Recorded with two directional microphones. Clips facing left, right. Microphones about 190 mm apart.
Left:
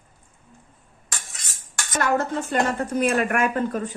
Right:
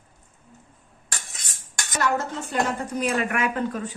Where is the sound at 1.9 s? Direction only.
55° left (ahead or behind).